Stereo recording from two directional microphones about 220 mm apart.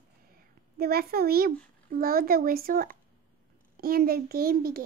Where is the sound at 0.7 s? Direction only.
45° right (ahead or behind).